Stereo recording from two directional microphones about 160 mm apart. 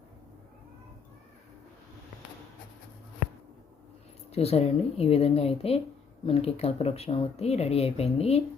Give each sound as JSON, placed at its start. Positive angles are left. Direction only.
{"t": 4.3, "sound": "speech", "side_deg": 40}